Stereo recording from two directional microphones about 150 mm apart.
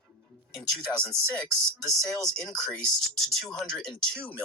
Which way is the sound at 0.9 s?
15° left (ahead or behind).